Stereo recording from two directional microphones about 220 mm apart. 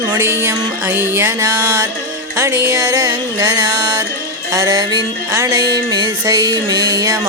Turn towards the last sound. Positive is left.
turn(degrees=-15)  # may be behind; listen again after turning